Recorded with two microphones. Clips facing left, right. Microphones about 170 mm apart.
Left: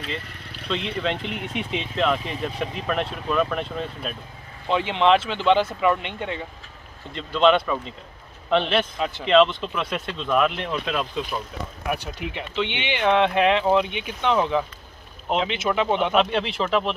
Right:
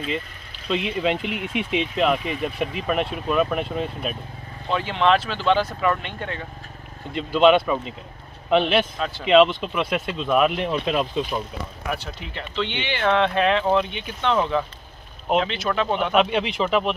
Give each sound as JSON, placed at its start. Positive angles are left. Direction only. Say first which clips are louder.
{"t": 0.7, "sound": "speech", "louder": "right 3 dB", "side_deg": -10}
{"t": 4.6, "sound": "speech", "louder": "left 1 dB", "side_deg": 20}
{"t": 7.2, "sound": "speech", "louder": "right 2 dB", "side_deg": -5}
{"t": 8.9, "sound": "speech", "louder": "left 1 dB", "side_deg": 20}
{"t": 9.2, "sound": "speech", "louder": "right 2 dB", "side_deg": -5}
{"t": 11.9, "sound": "speech", "louder": "left 3 dB", "side_deg": 15}
{"t": 16.1, "sound": "speech", "louder": "right 1 dB", "side_deg": -5}